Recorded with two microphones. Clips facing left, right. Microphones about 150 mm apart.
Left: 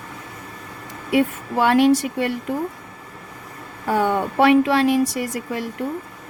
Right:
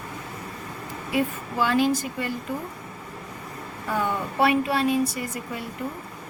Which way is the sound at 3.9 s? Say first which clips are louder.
Left 7 dB; 75° left (ahead or behind).